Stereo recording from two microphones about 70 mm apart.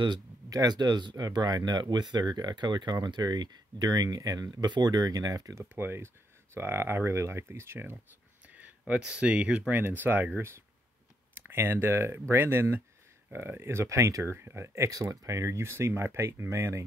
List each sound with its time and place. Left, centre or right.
0.0 s speech: right
5.6 s speech: right
8.5 s speech: centre; by 14.3 s right
14.3 s speech: right
14.9 s speech: right
15.7 s speech: right